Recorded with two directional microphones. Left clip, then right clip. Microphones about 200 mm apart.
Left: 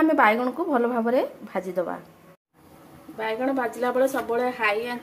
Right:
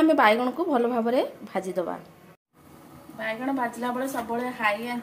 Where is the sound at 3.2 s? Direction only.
45° left (ahead or behind).